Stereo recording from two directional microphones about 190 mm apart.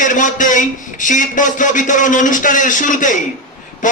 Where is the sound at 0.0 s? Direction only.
45° left (ahead or behind).